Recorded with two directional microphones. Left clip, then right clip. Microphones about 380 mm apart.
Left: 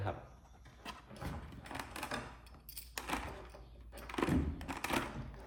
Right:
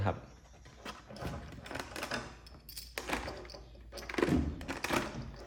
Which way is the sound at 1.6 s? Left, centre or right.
Centre.